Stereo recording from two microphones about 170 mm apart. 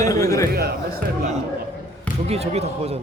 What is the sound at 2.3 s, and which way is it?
Speech, 35° right (ahead or behind).